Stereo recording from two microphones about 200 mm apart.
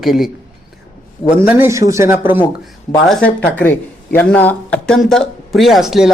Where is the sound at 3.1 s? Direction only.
5° left (ahead or behind).